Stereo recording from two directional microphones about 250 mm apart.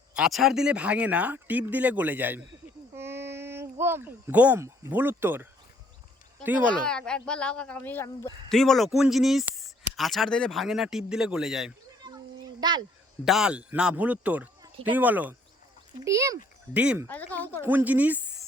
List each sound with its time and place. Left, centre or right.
0.1 s speech: centre
2.9 s a sound: centre
6.4 s speech: centre
12.0 s a sound: centre
13.2 s speech: centre
17.1 s speech: centre
17.6 s speech: centre